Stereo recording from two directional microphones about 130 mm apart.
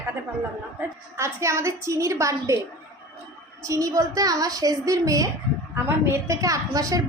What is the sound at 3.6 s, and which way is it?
A woman's voice, 25° right (ahead or behind).